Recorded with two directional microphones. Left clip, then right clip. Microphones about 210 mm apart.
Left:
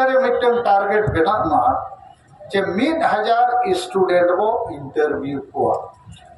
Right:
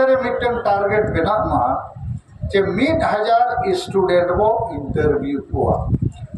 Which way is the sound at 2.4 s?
25° right (ahead or behind).